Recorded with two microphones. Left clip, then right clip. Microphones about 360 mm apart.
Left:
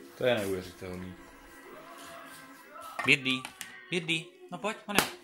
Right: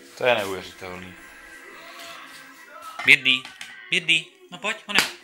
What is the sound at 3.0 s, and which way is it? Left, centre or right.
Speech, centre.